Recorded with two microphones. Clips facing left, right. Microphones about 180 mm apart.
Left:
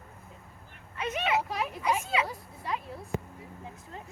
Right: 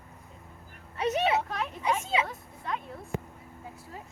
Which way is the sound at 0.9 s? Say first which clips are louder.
Right 4 dB; 35° right (ahead or behind).